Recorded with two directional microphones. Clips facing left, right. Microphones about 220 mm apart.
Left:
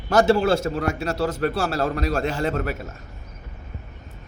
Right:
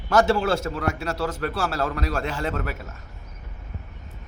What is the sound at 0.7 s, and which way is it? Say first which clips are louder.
A man's voice: left 3 dB; 30° left (ahead or behind).